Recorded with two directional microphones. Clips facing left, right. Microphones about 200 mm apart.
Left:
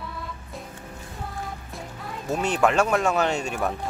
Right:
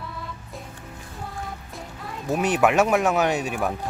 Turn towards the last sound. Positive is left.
turn(degrees=-5)  # may be behind; listen again after turning